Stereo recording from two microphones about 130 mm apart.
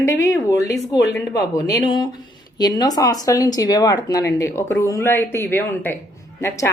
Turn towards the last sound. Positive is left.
turn(degrees=20)  # may be behind; listen again after turning